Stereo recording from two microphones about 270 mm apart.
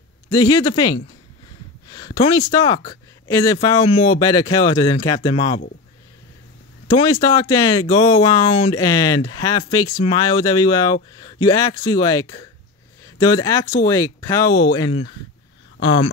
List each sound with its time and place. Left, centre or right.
0.3 s speech: centre
6.9 s speech: centre